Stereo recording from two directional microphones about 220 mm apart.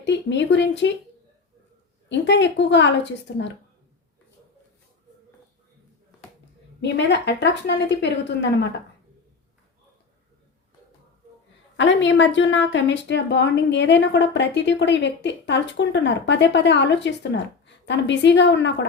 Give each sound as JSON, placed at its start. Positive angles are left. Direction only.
{"t": 0.0, "sound": "a woman's voice", "side_deg": 55}
{"t": 2.0, "sound": "a woman's voice", "side_deg": 55}
{"t": 6.8, "sound": "a woman's voice", "side_deg": 50}
{"t": 11.8, "sound": "a woman's voice", "side_deg": 55}